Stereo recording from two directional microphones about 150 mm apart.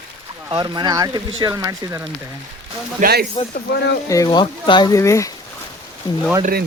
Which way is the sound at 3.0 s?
90° right.